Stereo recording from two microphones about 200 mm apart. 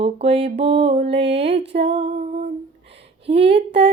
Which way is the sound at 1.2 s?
60° right (ahead or behind).